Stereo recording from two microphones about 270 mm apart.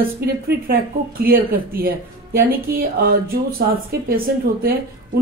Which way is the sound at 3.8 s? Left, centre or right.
Right.